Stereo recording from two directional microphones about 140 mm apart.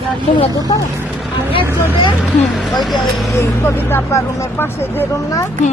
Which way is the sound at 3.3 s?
20° left (ahead or behind).